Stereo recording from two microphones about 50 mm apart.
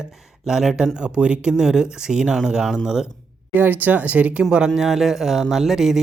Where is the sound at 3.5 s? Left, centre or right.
Right.